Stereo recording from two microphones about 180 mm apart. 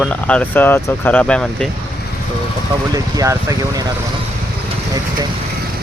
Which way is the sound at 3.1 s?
20° right (ahead or behind).